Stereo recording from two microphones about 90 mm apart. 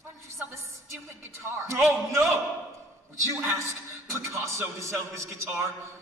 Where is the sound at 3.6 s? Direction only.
35° right (ahead or behind).